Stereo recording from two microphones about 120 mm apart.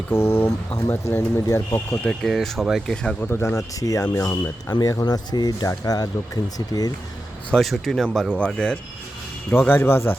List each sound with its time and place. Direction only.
0.1 s speech: 20° left (ahead or behind)
2.0 s speech: centre (ahead or behind)
3.2 s speech: 20° left (ahead or behind)
7.5 s speech: centre (ahead or behind); by 10.2 s 20° left (ahead or behind)